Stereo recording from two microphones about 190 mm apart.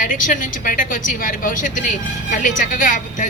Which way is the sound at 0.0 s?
45° left (ahead or behind).